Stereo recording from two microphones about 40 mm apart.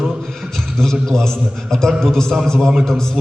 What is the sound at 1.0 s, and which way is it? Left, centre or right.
A man's voice, centre.